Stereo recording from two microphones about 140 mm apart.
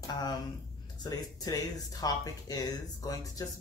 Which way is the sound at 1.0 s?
25° left (ahead or behind).